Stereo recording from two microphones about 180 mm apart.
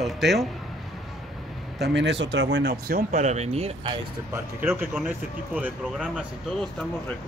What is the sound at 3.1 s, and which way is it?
Speech, 40° right (ahead or behind).